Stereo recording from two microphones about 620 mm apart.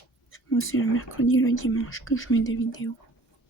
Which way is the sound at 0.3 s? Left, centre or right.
Centre.